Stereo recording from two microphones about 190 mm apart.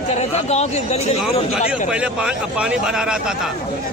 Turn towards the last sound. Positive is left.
turn(degrees=-5)  # may be behind; listen again after turning